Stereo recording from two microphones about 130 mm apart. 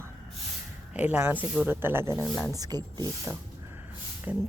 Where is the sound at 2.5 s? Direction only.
30° right (ahead or behind).